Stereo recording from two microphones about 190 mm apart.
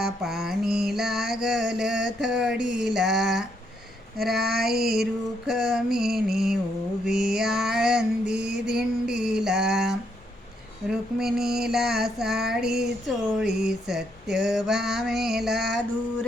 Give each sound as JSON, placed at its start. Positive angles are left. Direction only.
{"t": 0.0, "sound": "mantra", "side_deg": 0}
{"t": 4.6, "sound": "mantra", "side_deg": 0}